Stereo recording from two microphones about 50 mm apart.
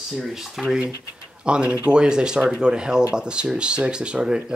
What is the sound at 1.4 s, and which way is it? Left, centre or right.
Speech, centre.